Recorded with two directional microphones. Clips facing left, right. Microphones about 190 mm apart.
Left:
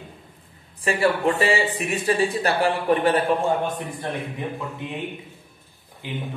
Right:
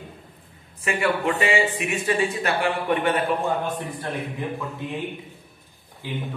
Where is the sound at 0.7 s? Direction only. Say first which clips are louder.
Left 2 dB; 35° left (ahead or behind).